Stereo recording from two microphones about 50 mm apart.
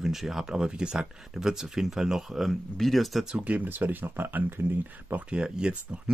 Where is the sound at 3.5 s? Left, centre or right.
Right.